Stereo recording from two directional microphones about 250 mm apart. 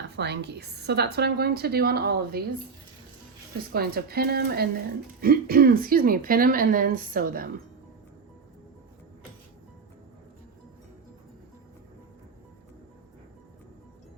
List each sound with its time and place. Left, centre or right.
0.2 s a woman's voice: right
3.7 s a woman's voice: right